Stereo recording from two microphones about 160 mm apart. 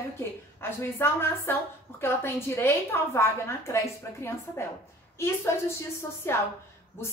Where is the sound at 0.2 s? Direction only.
15° left (ahead or behind).